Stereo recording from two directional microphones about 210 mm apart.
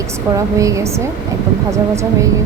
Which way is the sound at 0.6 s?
15° right (ahead or behind).